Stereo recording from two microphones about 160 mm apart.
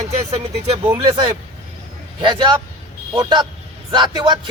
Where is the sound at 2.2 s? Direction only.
30° right (ahead or behind).